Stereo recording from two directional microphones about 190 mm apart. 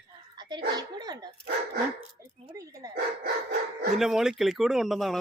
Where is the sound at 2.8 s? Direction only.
20° right (ahead or behind).